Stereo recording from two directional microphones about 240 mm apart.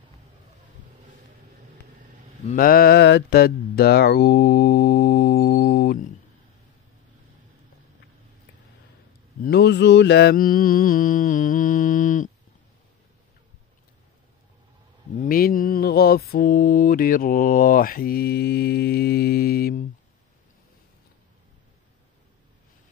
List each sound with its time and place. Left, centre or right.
2.4 s mantra: left
9.4 s mantra: left
15.1 s mantra: left